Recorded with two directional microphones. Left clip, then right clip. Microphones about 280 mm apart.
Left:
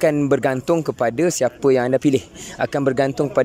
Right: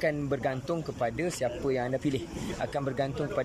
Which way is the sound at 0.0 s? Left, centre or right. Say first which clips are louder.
Left 12 dB; left.